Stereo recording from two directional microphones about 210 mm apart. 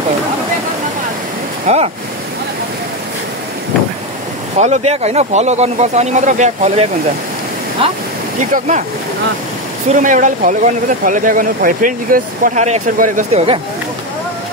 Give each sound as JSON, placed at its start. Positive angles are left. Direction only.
{"t": 1.7, "sound": "speech", "side_deg": -30}
{"t": 4.6, "sound": "speech", "side_deg": -30}
{"t": 9.9, "sound": "speech", "side_deg": -35}